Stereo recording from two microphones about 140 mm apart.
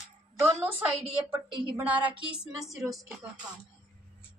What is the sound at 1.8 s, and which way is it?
Speech, 10° right (ahead or behind).